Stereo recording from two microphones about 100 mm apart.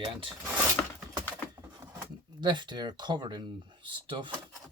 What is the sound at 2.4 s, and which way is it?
Speech, 50° right (ahead or behind).